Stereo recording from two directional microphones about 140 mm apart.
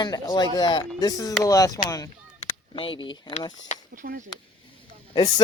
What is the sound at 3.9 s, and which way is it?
Speech, 70° right (ahead or behind).